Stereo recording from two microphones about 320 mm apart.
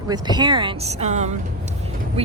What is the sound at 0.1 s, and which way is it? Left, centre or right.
Speech, centre.